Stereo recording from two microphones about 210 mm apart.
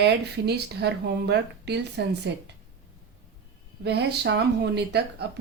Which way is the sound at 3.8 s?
50° right (ahead or behind).